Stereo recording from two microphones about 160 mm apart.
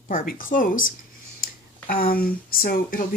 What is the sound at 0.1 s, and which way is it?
Speech, 60° left (ahead or behind).